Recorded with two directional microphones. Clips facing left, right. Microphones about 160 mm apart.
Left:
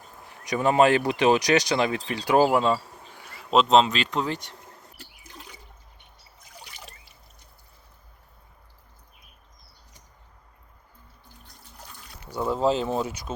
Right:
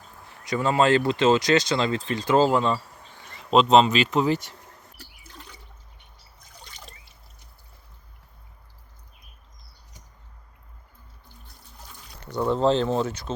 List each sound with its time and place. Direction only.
0.3 s speech: 15° left (ahead or behind); by 4.5 s 5° right (ahead or behind)
4.9 s water: 15° left (ahead or behind)
6.7 s trickle: 5° left (ahead or behind)
12.3 s speech: 5° left (ahead or behind)